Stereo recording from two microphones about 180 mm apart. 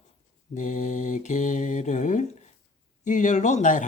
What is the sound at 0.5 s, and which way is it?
Mantra, 45° left (ahead or behind).